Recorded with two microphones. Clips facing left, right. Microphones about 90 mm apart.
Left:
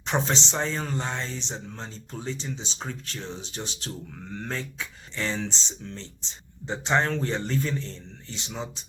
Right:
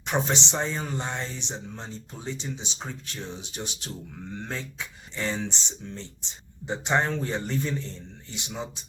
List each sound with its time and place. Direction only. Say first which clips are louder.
0.0 s speech: even; 15° right (ahead or behind)
5.1 s speech: even; 15° right (ahead or behind)